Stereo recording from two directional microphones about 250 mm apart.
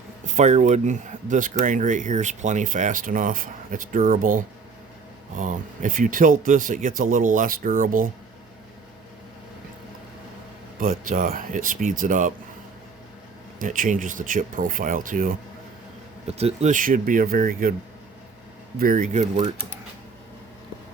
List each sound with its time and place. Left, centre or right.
0.3 s speech: right
10.8 s speech: right
13.6 s speech: right
18.8 s speech: right